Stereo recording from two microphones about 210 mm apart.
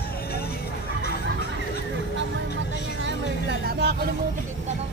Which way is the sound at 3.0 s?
55° right (ahead or behind).